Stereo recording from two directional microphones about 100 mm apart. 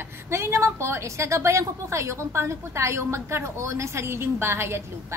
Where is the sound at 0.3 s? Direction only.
25° right (ahead or behind).